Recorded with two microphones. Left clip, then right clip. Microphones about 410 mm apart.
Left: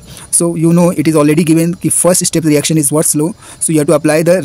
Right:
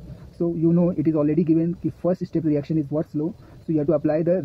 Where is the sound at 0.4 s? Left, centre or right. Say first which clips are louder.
Left 10 dB; right.